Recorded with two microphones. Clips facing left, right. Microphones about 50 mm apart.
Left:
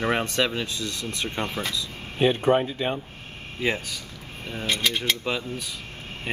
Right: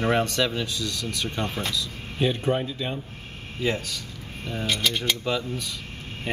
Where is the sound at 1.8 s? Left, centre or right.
Left.